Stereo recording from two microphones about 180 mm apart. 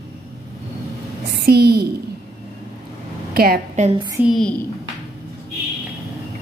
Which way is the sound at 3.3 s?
55° right (ahead or behind).